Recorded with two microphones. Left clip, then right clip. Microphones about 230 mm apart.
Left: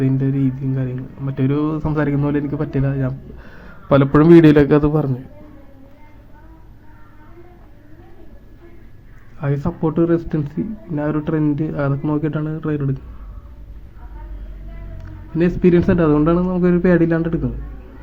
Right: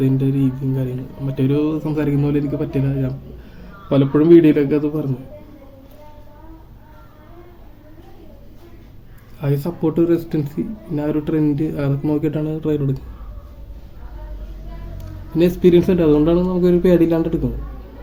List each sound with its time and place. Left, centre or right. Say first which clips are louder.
0.8 s speech: right 1 dB; centre
3.8 s a man's voice: left 3 dB; left
4.1 s a man's voice: left 1 dB; left
9.4 s speech: right 1 dB; centre
15.4 s speech: right 2 dB; centre